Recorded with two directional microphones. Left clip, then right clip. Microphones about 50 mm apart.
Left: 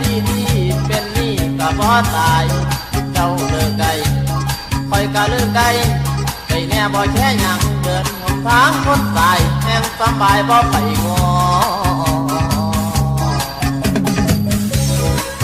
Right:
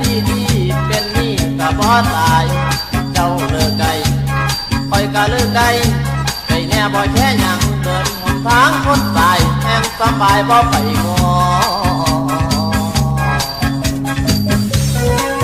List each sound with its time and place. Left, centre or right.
1.6 s music: right
4.9 s music: right